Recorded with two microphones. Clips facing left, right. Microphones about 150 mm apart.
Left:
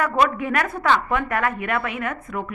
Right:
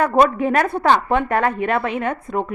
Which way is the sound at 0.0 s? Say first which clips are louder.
Right 5 dB; 35° right (ahead or behind).